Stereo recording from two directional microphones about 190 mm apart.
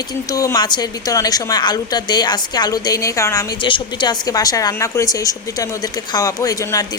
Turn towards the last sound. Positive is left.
turn(degrees=15)  # may be behind; listen again after turning